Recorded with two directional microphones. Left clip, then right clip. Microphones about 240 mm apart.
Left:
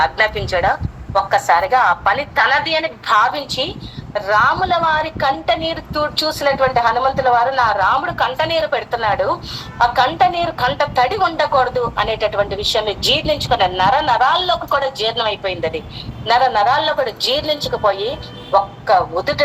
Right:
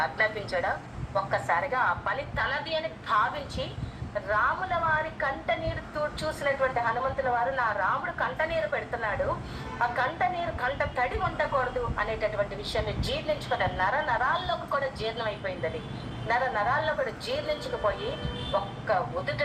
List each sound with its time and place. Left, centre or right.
0.0 s a woman's voice: left